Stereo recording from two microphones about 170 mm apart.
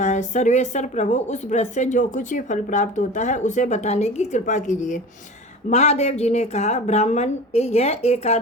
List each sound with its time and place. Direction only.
0.0 s a woman's voice: 45° left (ahead or behind)